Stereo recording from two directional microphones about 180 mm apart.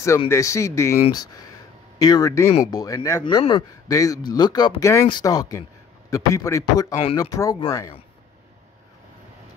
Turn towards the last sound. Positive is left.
turn(degrees=20)  # may be behind; listen again after turning